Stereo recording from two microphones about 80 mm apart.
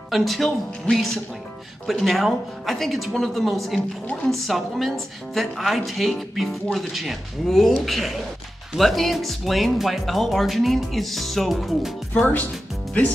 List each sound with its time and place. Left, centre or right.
0.1 s a woman's voice: centre
12.1 s speech: left